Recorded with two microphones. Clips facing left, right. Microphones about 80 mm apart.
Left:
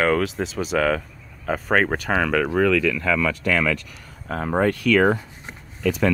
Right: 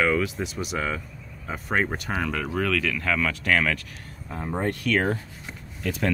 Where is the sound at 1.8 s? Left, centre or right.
Left.